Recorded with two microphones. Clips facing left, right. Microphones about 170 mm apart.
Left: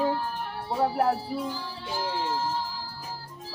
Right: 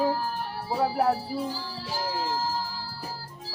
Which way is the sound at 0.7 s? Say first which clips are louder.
Even; centre (ahead or behind).